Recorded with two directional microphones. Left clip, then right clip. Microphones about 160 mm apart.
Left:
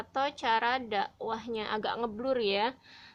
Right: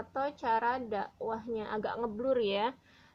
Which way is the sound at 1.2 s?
50° left (ahead or behind).